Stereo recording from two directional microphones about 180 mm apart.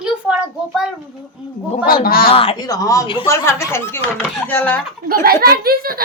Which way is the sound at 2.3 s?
30° left (ahead or behind).